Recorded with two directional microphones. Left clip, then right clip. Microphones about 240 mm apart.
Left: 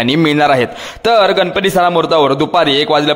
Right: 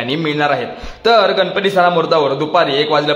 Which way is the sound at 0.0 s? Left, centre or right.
Left.